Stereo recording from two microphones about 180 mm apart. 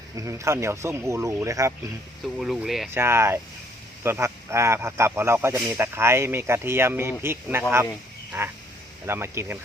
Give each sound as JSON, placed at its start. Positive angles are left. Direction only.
{"t": 0.2, "sound": "speech", "side_deg": -15}
{"t": 2.2, "sound": "speech", "side_deg": 0}
{"t": 2.9, "sound": "speech", "side_deg": -15}